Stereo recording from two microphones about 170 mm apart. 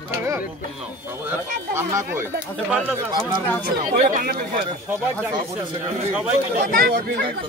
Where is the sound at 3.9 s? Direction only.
50° right (ahead or behind).